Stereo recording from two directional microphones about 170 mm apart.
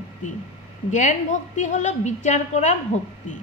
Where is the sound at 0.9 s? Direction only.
45° left (ahead or behind).